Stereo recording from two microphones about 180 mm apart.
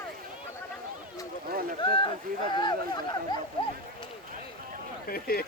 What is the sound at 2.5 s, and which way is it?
Speech, 25° left (ahead or behind).